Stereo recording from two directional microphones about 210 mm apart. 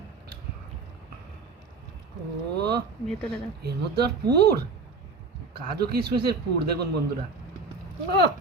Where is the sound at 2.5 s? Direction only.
50° right (ahead or behind).